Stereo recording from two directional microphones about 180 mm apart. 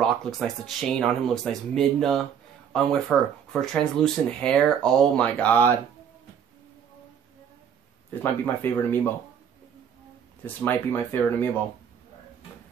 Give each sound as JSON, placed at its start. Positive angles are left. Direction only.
{"t": 0.0, "sound": "speech", "side_deg": 0}
{"t": 8.2, "sound": "speech", "side_deg": 10}
{"t": 10.4, "sound": "speech", "side_deg": 10}